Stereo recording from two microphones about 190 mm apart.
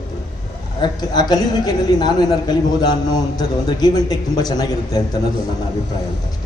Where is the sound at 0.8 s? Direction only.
20° left (ahead or behind).